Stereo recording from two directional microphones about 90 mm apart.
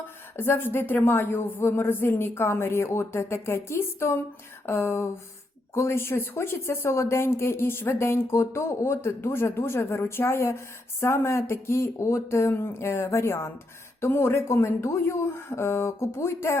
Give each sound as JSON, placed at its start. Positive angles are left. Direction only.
{"t": 0.0, "sound": "speech", "side_deg": 25}